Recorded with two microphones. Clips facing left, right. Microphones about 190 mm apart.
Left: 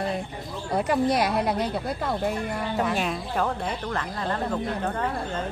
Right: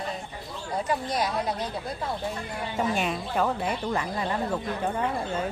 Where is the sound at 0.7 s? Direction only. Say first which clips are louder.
Left 5 dB; 65° left (ahead or behind).